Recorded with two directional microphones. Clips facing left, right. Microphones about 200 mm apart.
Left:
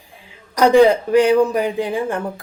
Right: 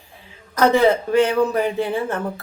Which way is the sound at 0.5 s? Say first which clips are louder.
Left 4 dB; 15° left (ahead or behind).